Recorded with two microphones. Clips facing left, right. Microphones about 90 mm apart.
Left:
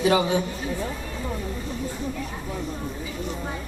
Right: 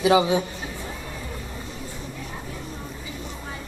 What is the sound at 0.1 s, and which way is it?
Speech, 15° right (ahead or behind).